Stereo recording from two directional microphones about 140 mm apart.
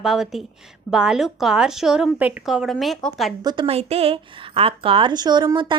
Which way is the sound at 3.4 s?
30° right (ahead or behind).